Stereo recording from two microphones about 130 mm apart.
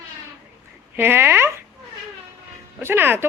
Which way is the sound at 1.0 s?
15° right (ahead or behind).